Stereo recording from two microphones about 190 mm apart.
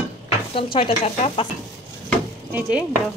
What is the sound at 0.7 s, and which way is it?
Speech, 30° left (ahead or behind).